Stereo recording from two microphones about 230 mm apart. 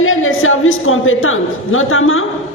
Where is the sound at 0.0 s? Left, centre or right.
Left.